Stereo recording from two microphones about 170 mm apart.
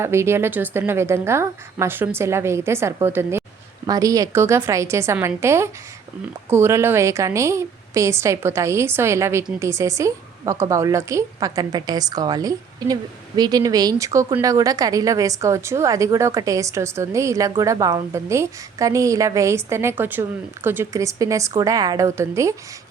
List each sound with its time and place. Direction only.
0.0 s a woman's voice: 15° right (ahead or behind)